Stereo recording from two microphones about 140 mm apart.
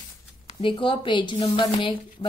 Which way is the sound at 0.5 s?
35° left (ahead or behind).